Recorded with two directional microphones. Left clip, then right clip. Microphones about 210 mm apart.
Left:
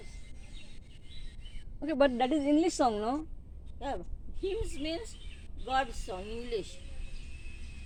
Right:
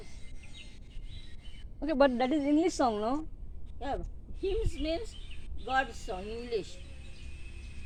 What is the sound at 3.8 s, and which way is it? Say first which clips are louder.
Speech: right 1 dB; 15° left (ahead or behind).